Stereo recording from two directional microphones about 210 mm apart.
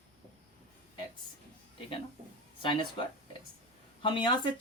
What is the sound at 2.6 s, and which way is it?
Speech, 25° left (ahead or behind).